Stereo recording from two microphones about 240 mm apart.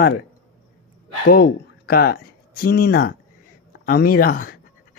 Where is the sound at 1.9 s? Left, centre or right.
Left.